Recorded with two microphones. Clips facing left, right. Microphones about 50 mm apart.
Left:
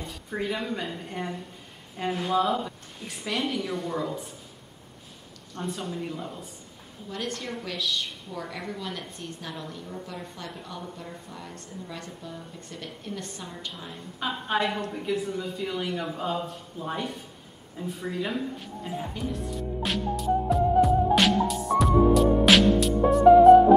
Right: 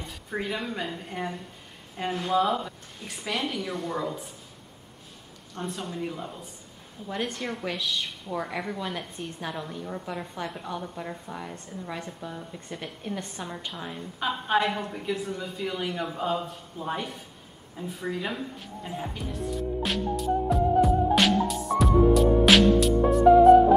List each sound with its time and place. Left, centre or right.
0.0 s a woman's voice: centre
5.5 s a woman's voice: centre
7.1 s a woman's voice: right
11.0 s a woman's voice: right
14.2 s a woman's voice: centre
17.7 s music: centre